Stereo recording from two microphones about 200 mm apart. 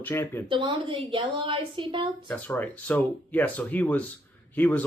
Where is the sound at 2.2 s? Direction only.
10° left (ahead or behind).